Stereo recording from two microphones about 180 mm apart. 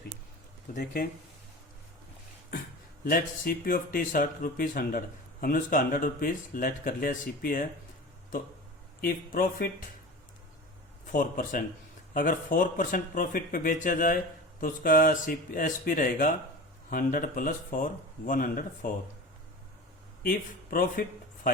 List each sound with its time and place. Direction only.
3.0 s speech: 55° left (ahead or behind)
9.0 s speech: 50° left (ahead or behind)
11.0 s a man's voice: 45° left (ahead or behind)
20.2 s speech: 50° left (ahead or behind)